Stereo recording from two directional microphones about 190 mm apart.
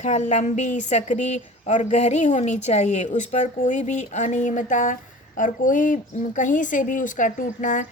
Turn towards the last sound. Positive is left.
turn(degrees=40)  # may be behind; listen again after turning